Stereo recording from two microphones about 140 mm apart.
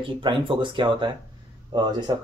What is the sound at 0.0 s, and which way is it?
Speech, 35° right (ahead or behind).